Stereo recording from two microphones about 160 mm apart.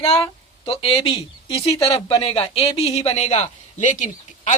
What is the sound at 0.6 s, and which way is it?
Speech, 35° left (ahead or behind).